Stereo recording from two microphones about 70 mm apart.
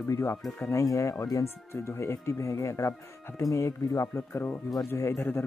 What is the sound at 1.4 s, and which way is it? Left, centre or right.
Speech, left.